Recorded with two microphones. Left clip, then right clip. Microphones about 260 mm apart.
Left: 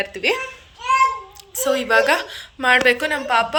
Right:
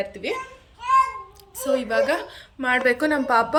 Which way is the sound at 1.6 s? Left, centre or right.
Centre.